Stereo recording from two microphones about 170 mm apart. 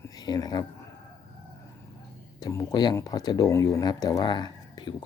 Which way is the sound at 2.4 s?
20° left (ahead or behind).